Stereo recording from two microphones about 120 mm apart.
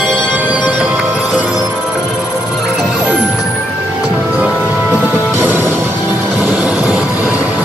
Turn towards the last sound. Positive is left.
turn(degrees=-15)  # may be behind; listen again after turning